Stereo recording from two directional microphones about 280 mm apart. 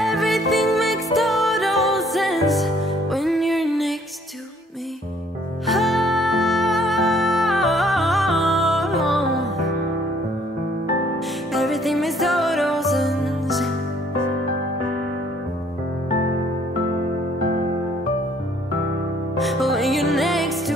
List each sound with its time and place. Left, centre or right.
0.0 s music: centre
5.7 s music: centre
11.5 s music: centre
19.3 s music: centre